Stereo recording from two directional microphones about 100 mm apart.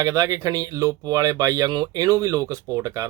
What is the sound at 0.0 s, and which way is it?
Speech, 35° right (ahead or behind).